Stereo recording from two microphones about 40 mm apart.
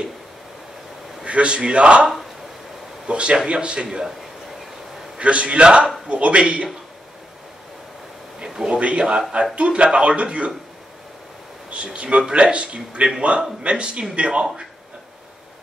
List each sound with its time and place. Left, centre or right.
1.2 s speech: right
3.1 s speech: right
5.2 s speech: right
8.6 s speech: right
11.7 s a man's voice: right